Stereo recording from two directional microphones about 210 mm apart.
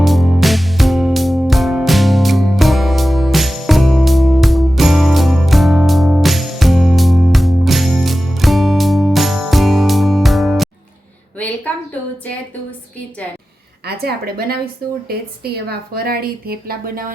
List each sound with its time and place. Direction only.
0.0 s music: centre (ahead or behind)
11.3 s a sound: 5° left (ahead or behind)
13.8 s a woman's voice: 45° right (ahead or behind)